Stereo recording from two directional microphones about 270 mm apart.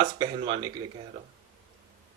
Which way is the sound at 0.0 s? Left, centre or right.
Centre.